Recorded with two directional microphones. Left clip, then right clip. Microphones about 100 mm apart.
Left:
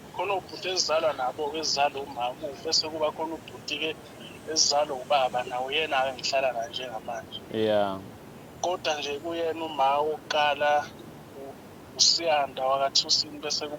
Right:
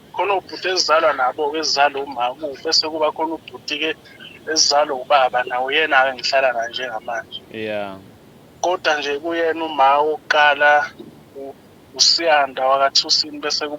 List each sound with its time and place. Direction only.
0.2 s speech: 35° right (ahead or behind)
7.5 s speech: 10° left (ahead or behind)
8.6 s speech: 40° right (ahead or behind)
11.9 s speech: 40° right (ahead or behind)